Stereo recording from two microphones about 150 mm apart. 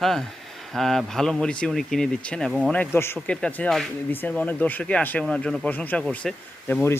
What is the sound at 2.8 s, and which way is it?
Speech, 15° left (ahead or behind).